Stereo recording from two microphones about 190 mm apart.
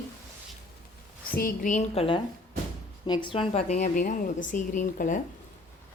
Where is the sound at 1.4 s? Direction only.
45° left (ahead or behind).